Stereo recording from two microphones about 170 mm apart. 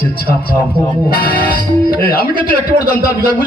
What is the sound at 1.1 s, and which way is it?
Music, 60° left (ahead or behind).